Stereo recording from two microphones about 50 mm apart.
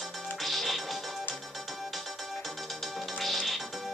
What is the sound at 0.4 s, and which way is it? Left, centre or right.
Music, centre.